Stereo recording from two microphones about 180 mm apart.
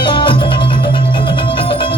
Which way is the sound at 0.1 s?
25° left (ahead or behind).